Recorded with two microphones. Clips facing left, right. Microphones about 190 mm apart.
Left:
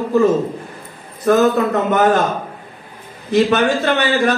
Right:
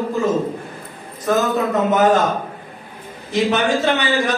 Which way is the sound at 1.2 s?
60° left (ahead or behind).